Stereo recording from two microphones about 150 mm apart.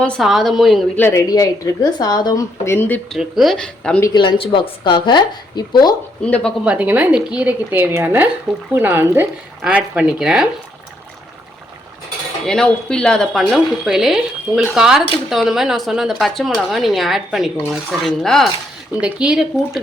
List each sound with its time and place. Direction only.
0.0 s speech: centre (ahead or behind)
0.9 s speech: 20° left (ahead or behind)
3.1 s speech: centre (ahead or behind)
4.0 s a woman's voice: 30° left (ahead or behind)
6.2 s speech: 5° left (ahead or behind)
6.7 s speech: 10° right (ahead or behind)
12.5 s speech: 5° left (ahead or behind)